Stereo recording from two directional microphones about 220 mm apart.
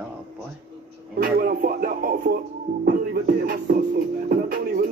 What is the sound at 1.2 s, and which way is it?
Music, 40° right (ahead or behind).